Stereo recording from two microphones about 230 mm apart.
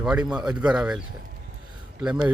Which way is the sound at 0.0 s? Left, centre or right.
Centre.